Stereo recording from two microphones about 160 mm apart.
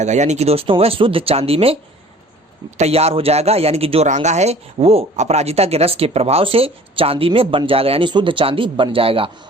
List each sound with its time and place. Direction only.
0.0 s speech: 45° right (ahead or behind)